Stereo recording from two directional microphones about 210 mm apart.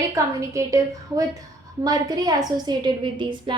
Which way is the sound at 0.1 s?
15° right (ahead or behind).